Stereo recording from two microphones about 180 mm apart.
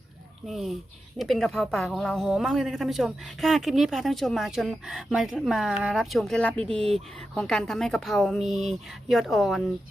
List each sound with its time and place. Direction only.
0.4 s speech: centre (ahead or behind)
6.6 s speech: 30° right (ahead or behind)
6.9 s speech: 5° left (ahead or behind)